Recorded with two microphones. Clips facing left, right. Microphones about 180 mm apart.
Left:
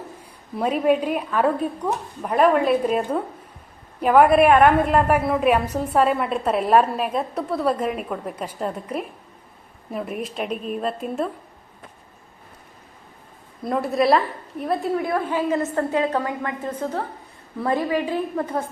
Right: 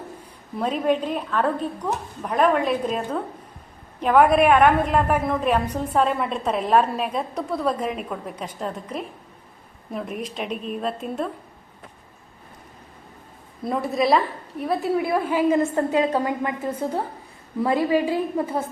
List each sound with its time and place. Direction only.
0.5 s a woman's voice: 10° left (ahead or behind)
13.7 s a woman's voice: centre (ahead or behind)
15.1 s a woman's voice: 10° right (ahead or behind)